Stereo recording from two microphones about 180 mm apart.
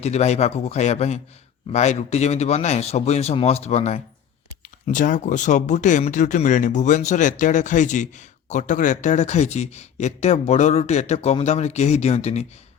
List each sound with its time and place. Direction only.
0.0 s speech: 35° left (ahead or behind)